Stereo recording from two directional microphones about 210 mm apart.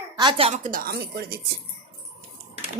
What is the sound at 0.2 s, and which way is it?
A woman's voice, 25° right (ahead or behind).